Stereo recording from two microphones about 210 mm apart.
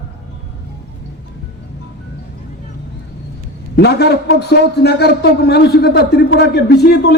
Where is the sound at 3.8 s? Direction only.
50° left (ahead or behind).